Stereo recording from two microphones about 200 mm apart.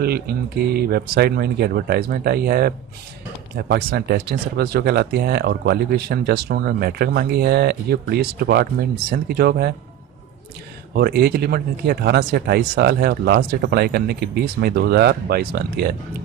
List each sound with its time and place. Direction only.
0.0 s speech: 50° right (ahead or behind)
10.9 s speech: 50° right (ahead or behind)